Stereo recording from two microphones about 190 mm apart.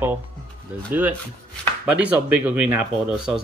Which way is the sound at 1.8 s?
10° right (ahead or behind).